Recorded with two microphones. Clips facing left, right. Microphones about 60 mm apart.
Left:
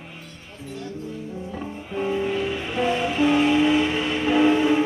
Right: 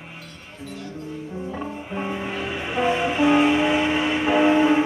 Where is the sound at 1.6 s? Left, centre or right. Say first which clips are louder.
Left 4 dB; centre.